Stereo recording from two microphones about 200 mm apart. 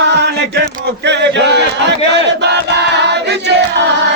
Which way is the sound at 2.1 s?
60° right (ahead or behind).